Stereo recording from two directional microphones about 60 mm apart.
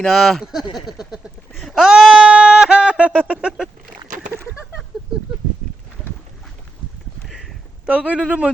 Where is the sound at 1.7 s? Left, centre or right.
Centre.